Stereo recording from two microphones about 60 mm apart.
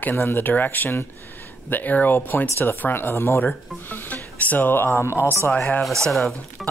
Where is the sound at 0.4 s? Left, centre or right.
Left.